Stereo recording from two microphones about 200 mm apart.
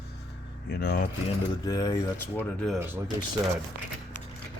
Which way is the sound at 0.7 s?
50° left (ahead or behind).